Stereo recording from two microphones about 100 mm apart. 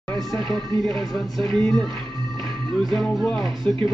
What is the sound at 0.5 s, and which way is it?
Speech, centre (ahead or behind).